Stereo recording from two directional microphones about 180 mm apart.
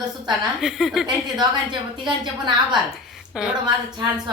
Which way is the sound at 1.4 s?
25° right (ahead or behind).